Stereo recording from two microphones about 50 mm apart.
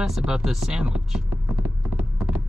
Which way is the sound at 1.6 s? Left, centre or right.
Right.